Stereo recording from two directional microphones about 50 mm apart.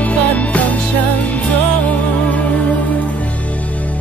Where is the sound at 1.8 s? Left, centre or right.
Left.